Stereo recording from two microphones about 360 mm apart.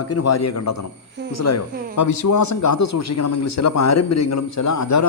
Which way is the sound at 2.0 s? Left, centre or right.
Left.